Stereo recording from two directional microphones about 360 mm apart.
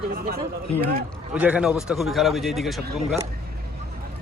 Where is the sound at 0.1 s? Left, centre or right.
Right.